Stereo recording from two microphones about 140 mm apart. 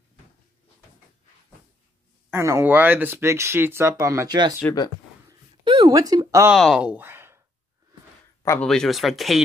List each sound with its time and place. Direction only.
2.3 s speech: 20° right (ahead or behind)
5.6 s a sound: 35° right (ahead or behind)
5.9 s speech: 25° right (ahead or behind)
6.5 s speech: 5° right (ahead or behind)
8.5 s speech: 5° left (ahead or behind)